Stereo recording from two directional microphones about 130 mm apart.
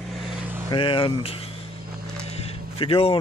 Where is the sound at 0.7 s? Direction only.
40° left (ahead or behind).